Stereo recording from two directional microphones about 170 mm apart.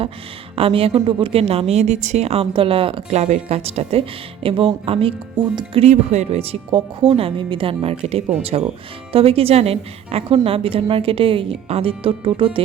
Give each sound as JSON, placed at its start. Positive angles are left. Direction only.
{"t": 0.5, "sound": "a woman's voice", "side_deg": -35}